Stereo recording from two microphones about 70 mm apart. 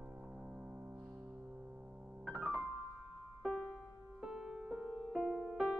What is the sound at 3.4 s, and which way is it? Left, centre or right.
Music, centre.